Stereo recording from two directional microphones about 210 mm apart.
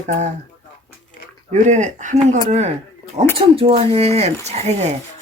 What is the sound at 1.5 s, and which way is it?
Speech, 35° right (ahead or behind).